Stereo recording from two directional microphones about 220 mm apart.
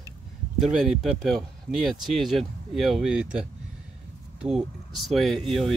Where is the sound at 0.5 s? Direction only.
Centre (ahead or behind).